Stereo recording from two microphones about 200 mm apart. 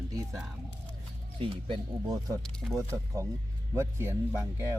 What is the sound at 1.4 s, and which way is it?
Speech, 25° right (ahead or behind).